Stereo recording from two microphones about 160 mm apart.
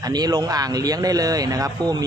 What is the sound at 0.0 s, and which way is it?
Speech, 25° right (ahead or behind).